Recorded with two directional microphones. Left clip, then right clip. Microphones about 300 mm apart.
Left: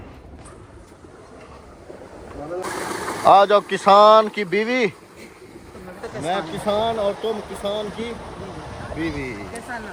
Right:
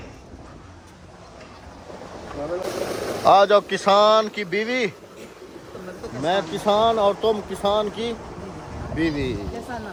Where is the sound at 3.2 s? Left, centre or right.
Centre.